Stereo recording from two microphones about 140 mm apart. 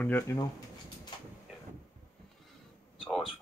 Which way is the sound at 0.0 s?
15° left (ahead or behind).